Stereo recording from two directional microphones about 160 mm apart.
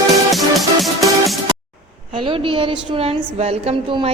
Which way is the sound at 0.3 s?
Centre (ahead or behind).